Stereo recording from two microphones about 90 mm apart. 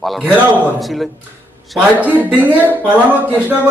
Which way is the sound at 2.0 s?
20° right (ahead or behind).